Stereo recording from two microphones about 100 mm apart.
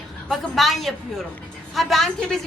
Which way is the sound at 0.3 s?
Centre (ahead or behind).